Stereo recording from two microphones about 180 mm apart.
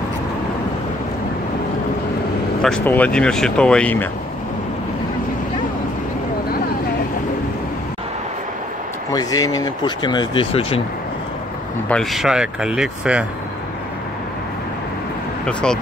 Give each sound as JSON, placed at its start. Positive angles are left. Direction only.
{"t": 2.6, "sound": "speech", "side_deg": 5}
{"t": 9.1, "sound": "speech", "side_deg": 20}
{"t": 11.9, "sound": "speech", "side_deg": 0}
{"t": 15.4, "sound": "speech", "side_deg": 5}